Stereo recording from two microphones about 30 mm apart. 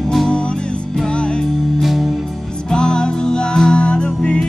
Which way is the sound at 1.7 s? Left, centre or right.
Centre.